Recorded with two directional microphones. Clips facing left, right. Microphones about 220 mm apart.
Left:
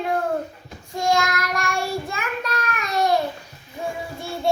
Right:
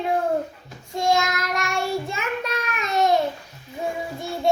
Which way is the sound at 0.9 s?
20° right (ahead or behind).